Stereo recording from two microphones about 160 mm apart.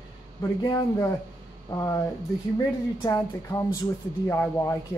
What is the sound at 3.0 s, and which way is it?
Speech, 25° left (ahead or behind).